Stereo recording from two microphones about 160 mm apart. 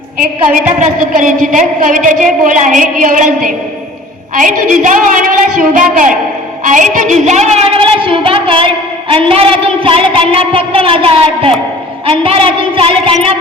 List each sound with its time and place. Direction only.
0.8 s a woman's voice: 55° right (ahead or behind); by 13.1 s 35° right (ahead or behind)